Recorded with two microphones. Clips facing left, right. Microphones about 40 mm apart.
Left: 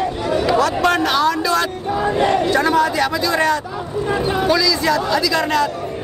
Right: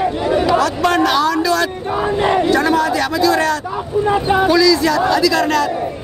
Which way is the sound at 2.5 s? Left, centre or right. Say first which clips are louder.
Right 1 dB; centre.